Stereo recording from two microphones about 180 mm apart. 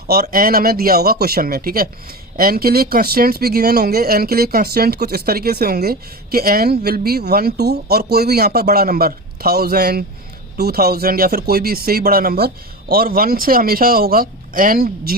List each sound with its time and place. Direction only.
0.1 s speech: 55° right (ahead or behind)